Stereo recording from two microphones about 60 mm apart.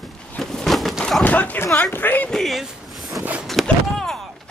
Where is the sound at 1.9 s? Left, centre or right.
Left.